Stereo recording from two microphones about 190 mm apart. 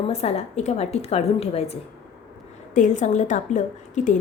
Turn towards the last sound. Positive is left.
turn(degrees=40)  # may be behind; listen again after turning